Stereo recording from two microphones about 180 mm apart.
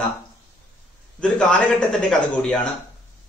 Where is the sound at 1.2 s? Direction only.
5° left (ahead or behind).